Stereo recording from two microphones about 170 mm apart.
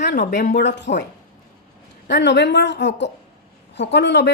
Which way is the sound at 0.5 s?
90° left.